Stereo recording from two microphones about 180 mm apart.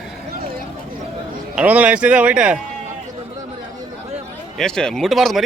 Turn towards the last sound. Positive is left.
turn(degrees=0)  # may be behind; listen again after turning